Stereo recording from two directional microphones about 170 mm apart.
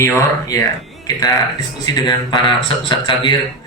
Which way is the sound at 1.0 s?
20° left (ahead or behind).